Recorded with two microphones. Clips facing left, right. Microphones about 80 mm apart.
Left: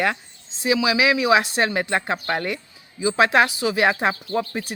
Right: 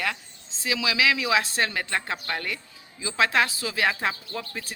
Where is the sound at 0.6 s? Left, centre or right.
Left.